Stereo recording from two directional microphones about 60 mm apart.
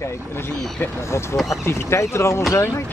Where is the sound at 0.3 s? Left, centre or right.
Left.